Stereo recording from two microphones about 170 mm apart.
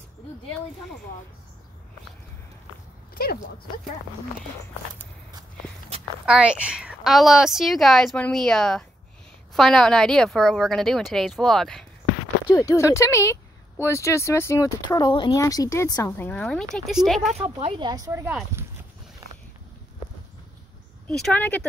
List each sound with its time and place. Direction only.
3.2 s speech: 60° left (ahead or behind)
6.2 s a woman's voice: 5° right (ahead or behind)
12.5 s a woman's voice: 20° left (ahead or behind); by 17.3 s centre (ahead or behind)
17.6 s speech: 30° right (ahead or behind)
18.6 s a sound: 15° right (ahead or behind)
21.2 s speech: 10° left (ahead or behind)